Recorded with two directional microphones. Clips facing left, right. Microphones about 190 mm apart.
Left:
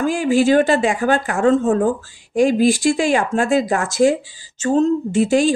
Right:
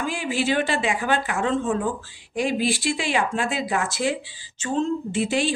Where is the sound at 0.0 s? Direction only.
45° left (ahead or behind).